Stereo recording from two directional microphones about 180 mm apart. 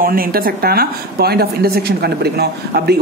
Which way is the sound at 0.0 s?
55° right (ahead or behind).